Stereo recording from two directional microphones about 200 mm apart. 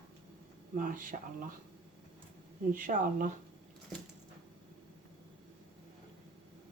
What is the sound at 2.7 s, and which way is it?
Speech, 40° right (ahead or behind).